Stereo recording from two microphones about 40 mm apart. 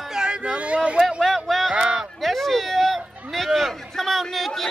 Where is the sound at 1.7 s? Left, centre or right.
Right.